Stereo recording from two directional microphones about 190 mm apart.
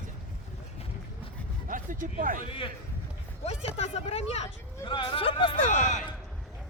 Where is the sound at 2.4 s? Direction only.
25° left (ahead or behind).